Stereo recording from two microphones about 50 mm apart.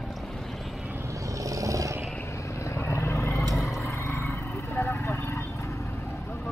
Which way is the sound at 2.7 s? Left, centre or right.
Left.